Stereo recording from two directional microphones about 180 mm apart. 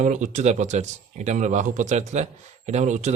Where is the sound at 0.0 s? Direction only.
40° right (ahead or behind).